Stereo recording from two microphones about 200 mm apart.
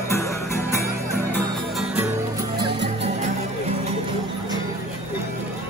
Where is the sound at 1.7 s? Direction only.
Centre (ahead or behind).